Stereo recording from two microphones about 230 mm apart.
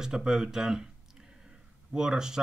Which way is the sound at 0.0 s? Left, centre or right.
Centre.